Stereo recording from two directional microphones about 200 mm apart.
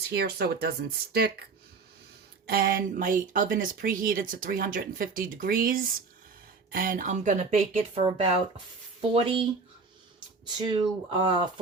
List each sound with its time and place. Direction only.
0.1 s speech: 55° right (ahead or behind)
2.5 s speech: 45° right (ahead or behind); by 9.4 s 30° right (ahead or behind)
10.4 s speech: 25° right (ahead or behind)